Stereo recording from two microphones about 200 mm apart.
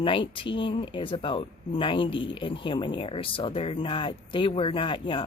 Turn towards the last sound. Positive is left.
turn(degrees=25)  # may be behind; listen again after turning